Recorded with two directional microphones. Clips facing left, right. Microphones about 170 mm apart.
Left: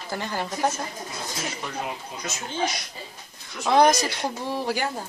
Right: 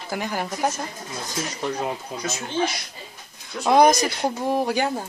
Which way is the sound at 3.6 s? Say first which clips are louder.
Right 2 dB; 15° right (ahead or behind).